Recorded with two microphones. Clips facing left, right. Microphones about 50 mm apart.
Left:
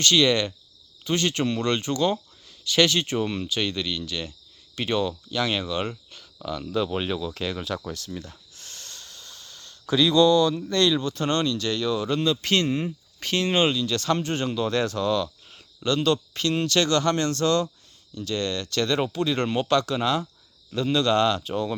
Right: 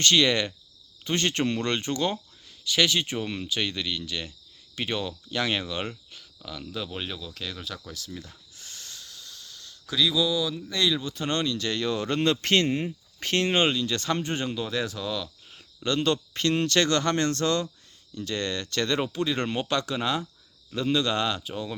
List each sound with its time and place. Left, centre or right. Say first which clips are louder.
0.0 s speech: left 2 dB; right
2.6 s speech: left 3 dB; centre
6.4 s speech: left 9 dB; centre
8.1 s speech: left 4 dB; centre
8.5 s a sound: right 3 dB; centre
10.7 s speech: left 4 dB; centre
16.3 s speech: even; right; by 21.8 s centre